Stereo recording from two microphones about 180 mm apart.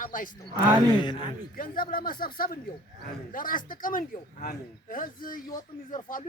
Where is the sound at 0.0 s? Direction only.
50° left (ahead or behind).